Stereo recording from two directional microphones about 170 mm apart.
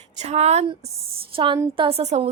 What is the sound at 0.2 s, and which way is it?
Speech, 40° right (ahead or behind).